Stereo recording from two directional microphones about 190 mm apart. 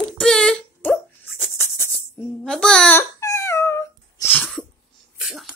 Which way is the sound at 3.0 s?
15° left (ahead or behind).